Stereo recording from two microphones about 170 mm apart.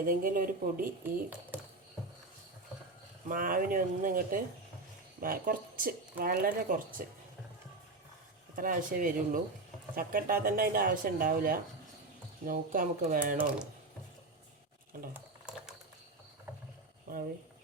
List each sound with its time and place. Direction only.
0.0 s speech: 55° right (ahead or behind)
3.2 s speech: 55° right (ahead or behind)
8.5 s speech: 55° right (ahead or behind)
15.1 s ratchet: 5° right (ahead or behind)